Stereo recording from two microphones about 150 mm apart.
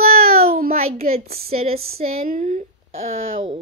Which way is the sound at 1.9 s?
65° right (ahead or behind).